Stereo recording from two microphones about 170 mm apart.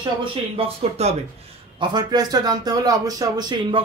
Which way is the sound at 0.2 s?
30° right (ahead or behind).